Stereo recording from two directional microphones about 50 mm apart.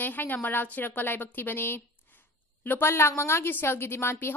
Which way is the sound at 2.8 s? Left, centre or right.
Left.